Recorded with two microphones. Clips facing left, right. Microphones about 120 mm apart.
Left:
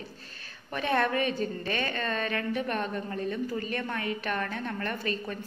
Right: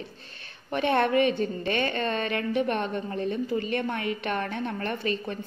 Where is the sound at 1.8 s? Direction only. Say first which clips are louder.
Right 4 dB; 30° right (ahead or behind).